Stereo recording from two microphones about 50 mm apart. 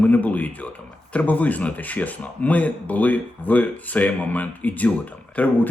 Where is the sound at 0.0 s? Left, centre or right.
Left.